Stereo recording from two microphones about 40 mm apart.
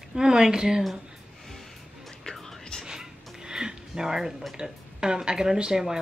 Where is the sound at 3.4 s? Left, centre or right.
Centre.